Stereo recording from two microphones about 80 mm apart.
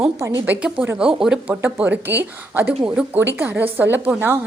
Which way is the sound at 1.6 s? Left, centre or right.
Right.